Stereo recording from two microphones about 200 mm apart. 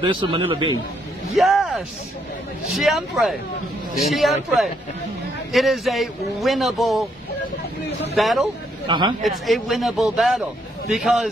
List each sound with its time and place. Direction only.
0.0 s a man's voice: 25° right (ahead or behind)
1.3 s a man's voice: centre (ahead or behind)
8.2 s a man's voice: centre (ahead or behind)
8.8 s a man's voice: 20° right (ahead or behind)
9.2 s a man's voice: centre (ahead or behind)